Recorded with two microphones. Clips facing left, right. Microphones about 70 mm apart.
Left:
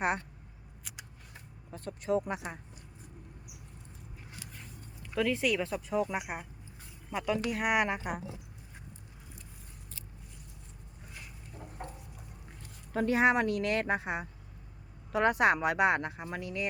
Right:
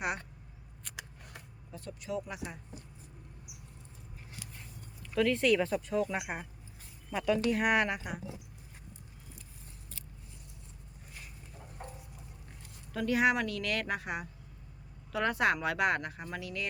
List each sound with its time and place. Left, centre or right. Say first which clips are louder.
0.9 s scissors: right 4 dB; centre
1.7 s speech: left 7 dB; left
5.1 s speech: right 2 dB; centre
7.8 s speech: left 1 dB; left
12.9 s speech: left 2 dB; left